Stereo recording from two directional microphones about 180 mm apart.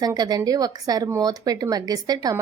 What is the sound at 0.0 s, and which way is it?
A woman's voice, 20° right (ahead or behind).